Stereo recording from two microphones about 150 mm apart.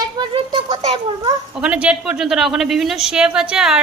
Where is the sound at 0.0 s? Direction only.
30° right (ahead or behind).